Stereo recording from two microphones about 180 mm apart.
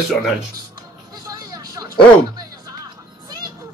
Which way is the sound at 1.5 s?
20° right (ahead or behind).